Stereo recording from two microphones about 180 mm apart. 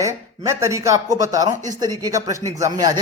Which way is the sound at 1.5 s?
45° right (ahead or behind).